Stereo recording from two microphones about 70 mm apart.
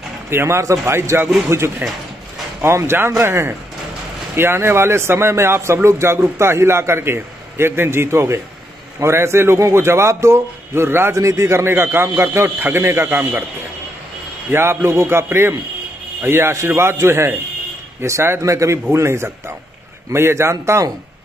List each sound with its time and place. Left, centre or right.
0.3 s a man's voice: right
11.1 s speech: right
14.5 s a man's voice: right